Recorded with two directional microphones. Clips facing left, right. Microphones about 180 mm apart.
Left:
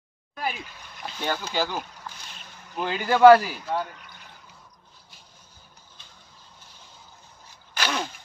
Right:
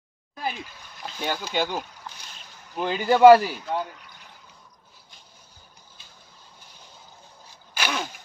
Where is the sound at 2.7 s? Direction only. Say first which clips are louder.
Right 3 dB; 15° right (ahead or behind).